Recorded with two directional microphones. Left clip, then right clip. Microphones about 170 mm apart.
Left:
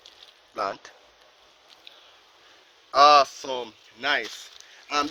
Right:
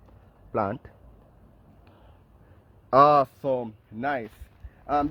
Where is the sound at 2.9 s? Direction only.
55° right (ahead or behind).